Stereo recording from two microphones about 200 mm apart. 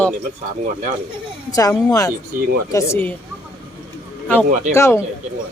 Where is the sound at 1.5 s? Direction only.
20° left (ahead or behind).